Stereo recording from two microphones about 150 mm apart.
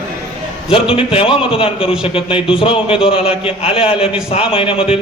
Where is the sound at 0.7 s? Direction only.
35° left (ahead or behind).